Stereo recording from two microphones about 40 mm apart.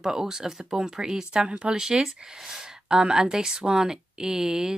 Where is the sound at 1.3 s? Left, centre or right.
Right.